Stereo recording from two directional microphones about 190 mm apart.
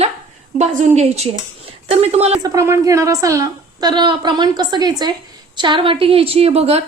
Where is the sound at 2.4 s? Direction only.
15° right (ahead or behind); by 6.8 s 35° right (ahead or behind).